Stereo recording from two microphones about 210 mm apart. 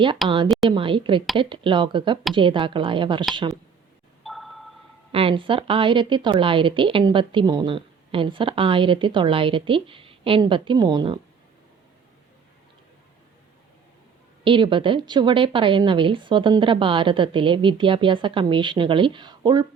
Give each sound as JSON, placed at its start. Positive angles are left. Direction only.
{"t": 0.4, "sound": "speech", "side_deg": 0}
{"t": 0.7, "sound": "a woman's voice", "side_deg": -25}
{"t": 4.2, "sound": "a sound", "side_deg": 0}
{"t": 5.1, "sound": "a woman's voice", "side_deg": -25}
{"t": 14.4, "sound": "a woman's voice", "side_deg": -25}